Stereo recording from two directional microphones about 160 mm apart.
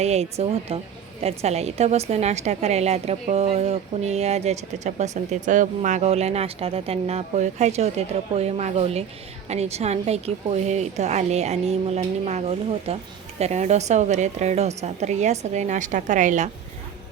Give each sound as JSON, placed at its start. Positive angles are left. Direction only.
{"t": 0.0, "sound": "a woman's voice", "side_deg": -45}